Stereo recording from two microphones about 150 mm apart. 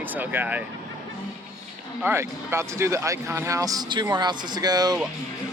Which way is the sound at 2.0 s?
15° right (ahead or behind).